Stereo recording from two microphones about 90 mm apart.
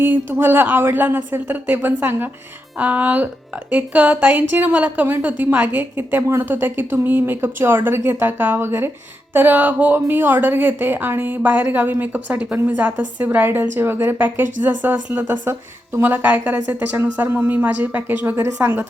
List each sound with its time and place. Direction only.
0.0 s a woman's voice: 25° right (ahead or behind)